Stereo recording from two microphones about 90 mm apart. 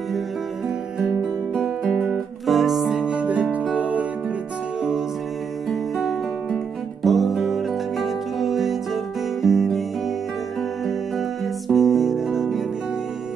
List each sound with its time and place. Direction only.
1.5 s music: centre (ahead or behind); by 4.0 s 15° right (ahead or behind)
5.7 s music: centre (ahead or behind)
11.1 s music: centre (ahead or behind)